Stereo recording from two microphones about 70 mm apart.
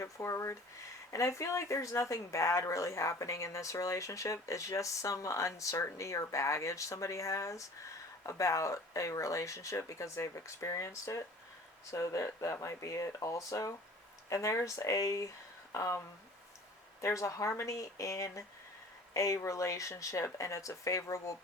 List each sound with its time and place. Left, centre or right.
0.0 s speech: left
17.0 s speech: left